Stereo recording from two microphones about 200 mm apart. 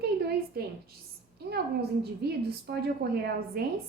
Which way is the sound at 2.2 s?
55° right (ahead or behind).